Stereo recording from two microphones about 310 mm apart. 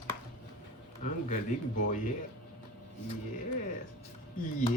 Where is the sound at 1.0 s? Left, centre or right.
Left.